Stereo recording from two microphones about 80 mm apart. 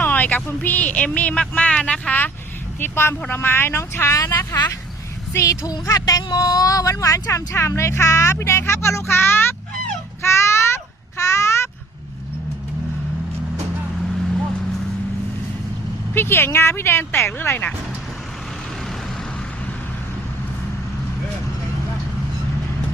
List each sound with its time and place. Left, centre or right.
0.0 s speech: left
4.2 s a woman's voice: left
10.2 s a sound: left
16.1 s speech: left